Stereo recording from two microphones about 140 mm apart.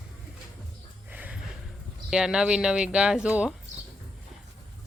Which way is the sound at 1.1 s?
10° right (ahead or behind).